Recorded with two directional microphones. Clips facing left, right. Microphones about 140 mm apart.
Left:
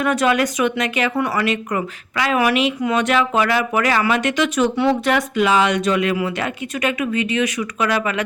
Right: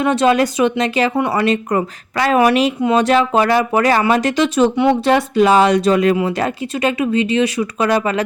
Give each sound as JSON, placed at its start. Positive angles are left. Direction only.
{"t": 0.0, "sound": "speech", "side_deg": -25}